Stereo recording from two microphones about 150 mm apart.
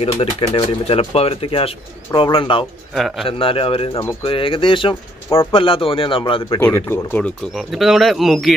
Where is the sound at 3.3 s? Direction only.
35° left (ahead or behind).